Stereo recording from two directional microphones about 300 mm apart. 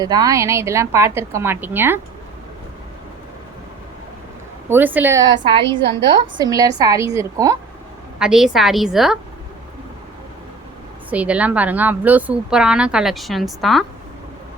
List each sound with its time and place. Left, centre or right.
0.0 s a woman's voice: centre
4.7 s a woman's voice: centre
11.1 s speech: centre